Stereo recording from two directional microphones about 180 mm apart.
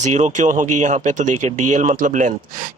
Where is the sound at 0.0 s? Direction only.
40° right (ahead or behind).